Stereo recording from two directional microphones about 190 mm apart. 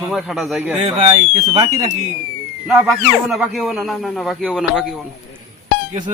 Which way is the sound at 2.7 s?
Centre (ahead or behind).